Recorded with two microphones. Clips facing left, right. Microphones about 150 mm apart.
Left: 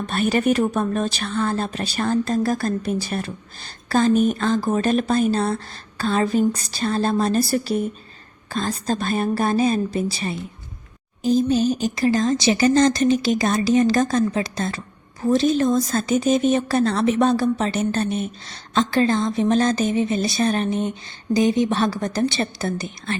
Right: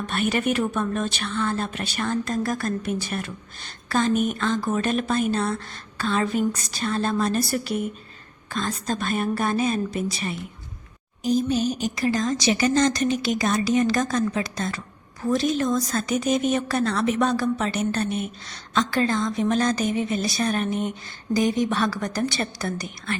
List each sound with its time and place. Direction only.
0.1 s a woman's voice: 35° left (ahead or behind)